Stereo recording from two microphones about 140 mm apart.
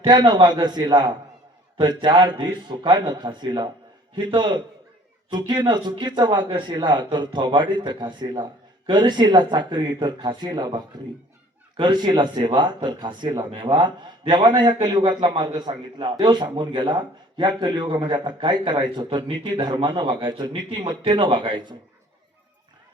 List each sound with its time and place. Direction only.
0.0 s a man's voice: 30° right (ahead or behind)